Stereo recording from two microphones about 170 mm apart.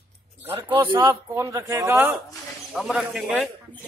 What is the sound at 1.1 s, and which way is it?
A man's voice, 15° right (ahead or behind).